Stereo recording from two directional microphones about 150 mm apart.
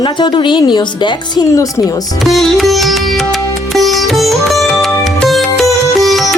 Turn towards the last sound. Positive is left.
turn(degrees=0)  # may be behind; listen again after turning